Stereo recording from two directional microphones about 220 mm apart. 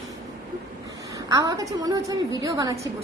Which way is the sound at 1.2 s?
15° right (ahead or behind).